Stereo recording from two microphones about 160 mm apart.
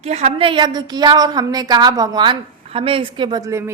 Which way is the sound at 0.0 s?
45° right (ahead or behind).